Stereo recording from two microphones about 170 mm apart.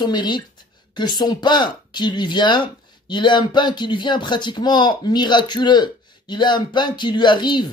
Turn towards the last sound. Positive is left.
turn(degrees=25)  # may be behind; listen again after turning